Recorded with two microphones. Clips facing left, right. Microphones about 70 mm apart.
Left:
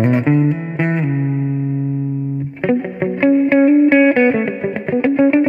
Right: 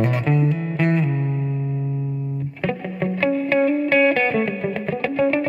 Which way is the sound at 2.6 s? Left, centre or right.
Left.